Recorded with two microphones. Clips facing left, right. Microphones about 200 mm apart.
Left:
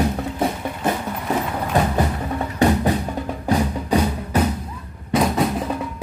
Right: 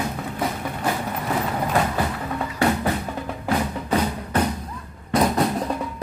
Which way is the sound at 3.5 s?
10° left (ahead or behind).